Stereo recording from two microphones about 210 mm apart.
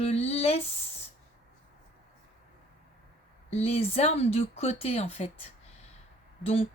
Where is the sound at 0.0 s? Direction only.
30° left (ahead or behind).